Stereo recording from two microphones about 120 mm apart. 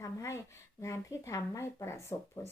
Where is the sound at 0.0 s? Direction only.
25° left (ahead or behind).